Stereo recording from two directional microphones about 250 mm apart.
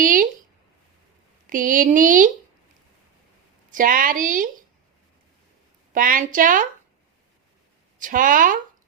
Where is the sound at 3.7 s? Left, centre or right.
Right.